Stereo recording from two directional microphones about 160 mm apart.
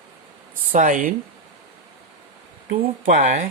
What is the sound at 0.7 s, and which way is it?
Speech, 55° right (ahead or behind).